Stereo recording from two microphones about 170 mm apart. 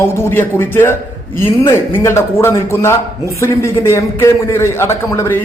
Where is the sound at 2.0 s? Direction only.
15° left (ahead or behind).